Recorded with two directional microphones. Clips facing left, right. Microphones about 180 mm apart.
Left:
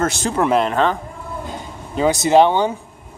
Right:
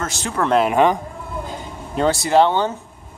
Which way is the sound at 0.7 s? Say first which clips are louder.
Right 2 dB; 15° right (ahead or behind).